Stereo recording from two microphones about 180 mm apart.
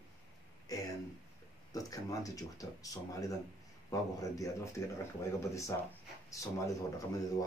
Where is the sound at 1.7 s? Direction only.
20° left (ahead or behind).